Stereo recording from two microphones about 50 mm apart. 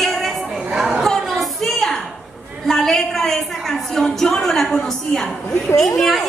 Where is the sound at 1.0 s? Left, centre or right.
Centre.